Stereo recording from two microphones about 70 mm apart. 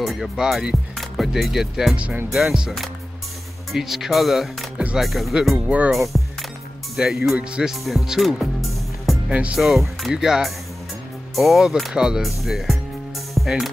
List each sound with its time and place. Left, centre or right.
0.0 s speech: centre
3.7 s speech: centre
7.8 s music: centre
9.3 s speech: centre
9.6 s speech: centre
13.3 s music: centre